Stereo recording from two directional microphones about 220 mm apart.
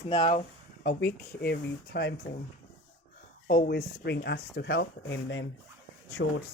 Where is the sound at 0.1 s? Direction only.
20° left (ahead or behind).